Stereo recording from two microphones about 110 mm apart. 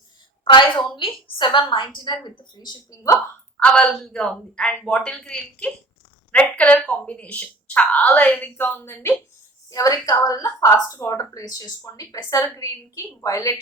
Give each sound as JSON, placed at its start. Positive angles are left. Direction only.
{"t": 0.4, "sound": "a woman's voice", "side_deg": 45}
{"t": 3.6, "sound": "a woman's voice", "side_deg": 10}